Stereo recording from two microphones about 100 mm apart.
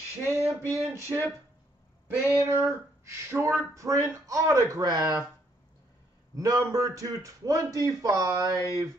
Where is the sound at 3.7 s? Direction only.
35° right (ahead or behind).